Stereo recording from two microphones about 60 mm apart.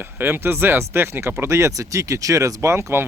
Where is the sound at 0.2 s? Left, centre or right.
Right.